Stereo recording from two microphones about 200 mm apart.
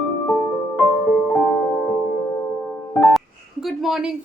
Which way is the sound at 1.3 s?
5° left (ahead or behind).